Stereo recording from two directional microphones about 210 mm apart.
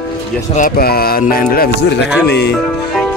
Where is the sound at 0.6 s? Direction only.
45° left (ahead or behind).